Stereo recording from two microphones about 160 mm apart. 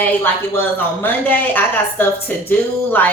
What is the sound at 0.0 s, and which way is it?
A woman's voice, 15° left (ahead or behind).